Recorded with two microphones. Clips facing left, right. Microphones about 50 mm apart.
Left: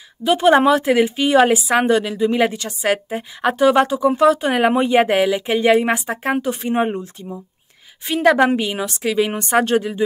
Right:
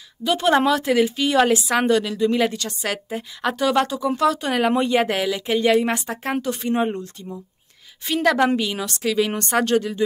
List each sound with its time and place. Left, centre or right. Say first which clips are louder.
0.2 s a woman's voice: left 5 dB; centre